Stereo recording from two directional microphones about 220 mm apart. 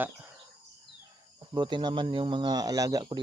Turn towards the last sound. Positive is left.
turn(degrees=-15)  # may be behind; listen again after turning